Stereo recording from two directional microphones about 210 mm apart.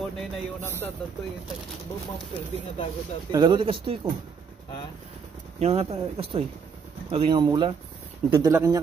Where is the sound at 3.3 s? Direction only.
20° right (ahead or behind).